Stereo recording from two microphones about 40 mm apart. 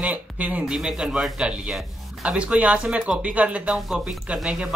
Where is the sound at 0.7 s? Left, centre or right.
Centre.